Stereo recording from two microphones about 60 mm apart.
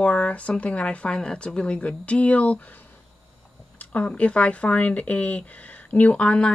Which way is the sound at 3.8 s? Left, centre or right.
Left.